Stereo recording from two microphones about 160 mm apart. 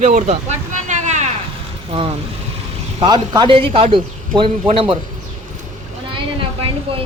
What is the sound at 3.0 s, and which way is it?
Speech, 25° right (ahead or behind).